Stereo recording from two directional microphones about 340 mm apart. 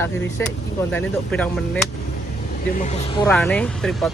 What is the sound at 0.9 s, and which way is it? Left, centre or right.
Speech, centre.